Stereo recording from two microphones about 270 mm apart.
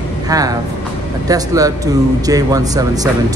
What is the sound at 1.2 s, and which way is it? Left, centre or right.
Speech, centre.